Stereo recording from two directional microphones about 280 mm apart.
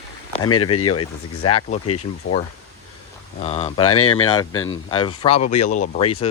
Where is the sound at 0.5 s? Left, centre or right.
Left.